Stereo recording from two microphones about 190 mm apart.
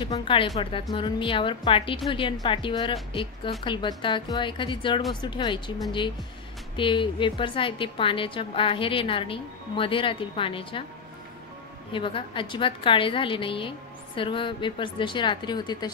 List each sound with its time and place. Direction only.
0.0 s a woman's voice: 25° left (ahead or behind)
6.8 s a woman's voice: 25° left (ahead or behind)
11.9 s a woman's voice: 25° left (ahead or behind)